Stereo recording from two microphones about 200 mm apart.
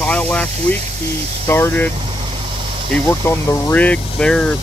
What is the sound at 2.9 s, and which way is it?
Speech, 10° left (ahead or behind).